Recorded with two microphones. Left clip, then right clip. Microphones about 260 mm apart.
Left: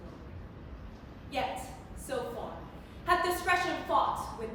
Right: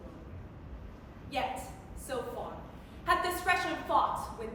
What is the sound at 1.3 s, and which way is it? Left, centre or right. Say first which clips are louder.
Speech: even; centre.